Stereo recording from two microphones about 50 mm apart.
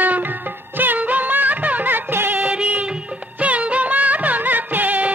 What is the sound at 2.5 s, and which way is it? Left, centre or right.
Music of bollywood, right.